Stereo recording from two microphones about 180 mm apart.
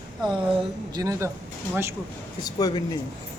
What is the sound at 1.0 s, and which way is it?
Speech, 15° right (ahead or behind).